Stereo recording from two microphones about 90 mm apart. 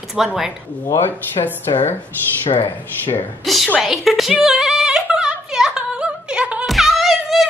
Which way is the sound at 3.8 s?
Centre (ahead or behind).